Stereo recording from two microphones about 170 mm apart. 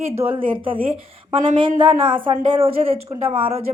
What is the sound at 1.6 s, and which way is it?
Speech, 30° right (ahead or behind).